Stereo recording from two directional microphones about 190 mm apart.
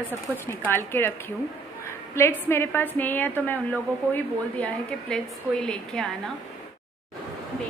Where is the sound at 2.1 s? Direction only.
15° left (ahead or behind).